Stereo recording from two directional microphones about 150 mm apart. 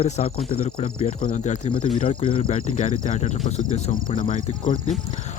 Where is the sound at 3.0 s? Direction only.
55° left (ahead or behind).